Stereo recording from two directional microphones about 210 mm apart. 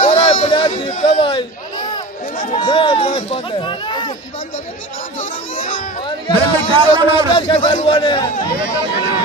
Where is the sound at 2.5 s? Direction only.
25° left (ahead or behind).